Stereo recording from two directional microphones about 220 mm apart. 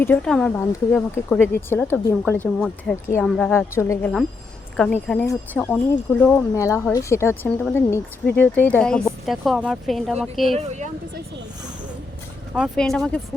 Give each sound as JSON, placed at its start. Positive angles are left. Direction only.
{"t": 0.0, "sound": "speech", "side_deg": 5}
{"t": 10.6, "sound": "speech", "side_deg": -30}
{"t": 12.5, "sound": "speech", "side_deg": 0}